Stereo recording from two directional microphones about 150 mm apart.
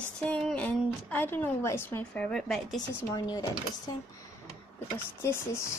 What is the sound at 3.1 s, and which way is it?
Speech, 25° left (ahead or behind).